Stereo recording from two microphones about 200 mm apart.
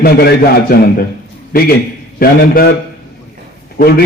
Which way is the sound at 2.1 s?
50° left (ahead or behind).